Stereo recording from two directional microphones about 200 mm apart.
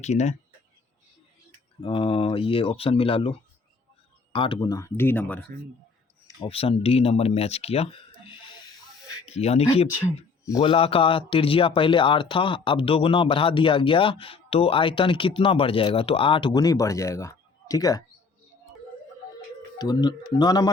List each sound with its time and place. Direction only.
0.0 s speech: 35° left (ahead or behind)
1.8 s speech: 25° left (ahead or behind); by 5.5 s 10° left (ahead or behind)
6.4 s speech: 30° left (ahead or behind)
9.3 s speech: 30° left (ahead or behind)
10.0 s speech: 15° left (ahead or behind)
10.6 s speech: 25° left (ahead or behind)
19.8 s speech: 20° left (ahead or behind)